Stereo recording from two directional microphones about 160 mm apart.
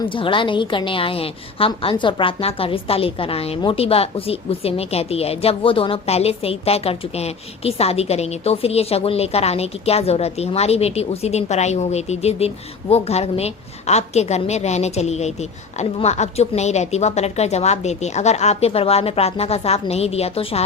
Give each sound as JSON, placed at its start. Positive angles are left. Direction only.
{"t": 0.0, "sound": "a woman's voice", "side_deg": 30}